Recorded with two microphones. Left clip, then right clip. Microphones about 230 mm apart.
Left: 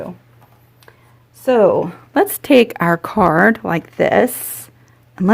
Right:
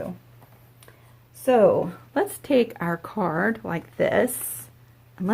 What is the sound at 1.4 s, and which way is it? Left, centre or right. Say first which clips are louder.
A woman's voice: left 5 dB; left.